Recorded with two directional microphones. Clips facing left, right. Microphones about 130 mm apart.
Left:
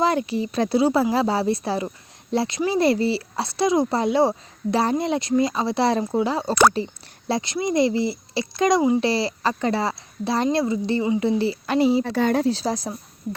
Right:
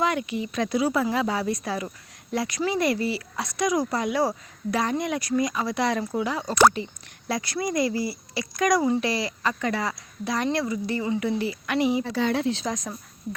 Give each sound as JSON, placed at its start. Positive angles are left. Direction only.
{"t": 0.0, "sound": "speech", "side_deg": 35}
{"t": 12.0, "sound": "speech", "side_deg": 50}